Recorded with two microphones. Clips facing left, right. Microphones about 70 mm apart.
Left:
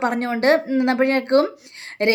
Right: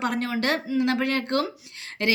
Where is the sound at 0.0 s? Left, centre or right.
Left.